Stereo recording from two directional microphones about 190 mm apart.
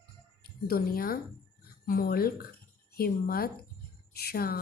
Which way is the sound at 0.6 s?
50° left (ahead or behind).